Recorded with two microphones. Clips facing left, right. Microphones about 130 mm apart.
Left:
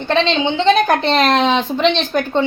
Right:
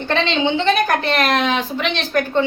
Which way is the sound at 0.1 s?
20° left (ahead or behind).